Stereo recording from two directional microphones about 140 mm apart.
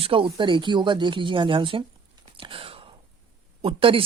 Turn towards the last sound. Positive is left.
turn(degrees=-40)  # may be behind; listen again after turning